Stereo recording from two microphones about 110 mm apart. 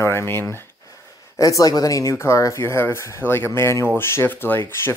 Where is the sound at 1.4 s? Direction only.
30° left (ahead or behind).